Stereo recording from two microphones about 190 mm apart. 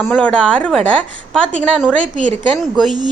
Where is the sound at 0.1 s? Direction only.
5° left (ahead or behind).